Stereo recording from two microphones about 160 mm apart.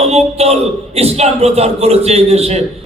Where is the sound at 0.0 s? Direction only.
40° right (ahead or behind).